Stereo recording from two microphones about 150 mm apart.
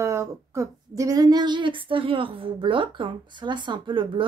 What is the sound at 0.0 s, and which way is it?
Speech, 20° right (ahead or behind).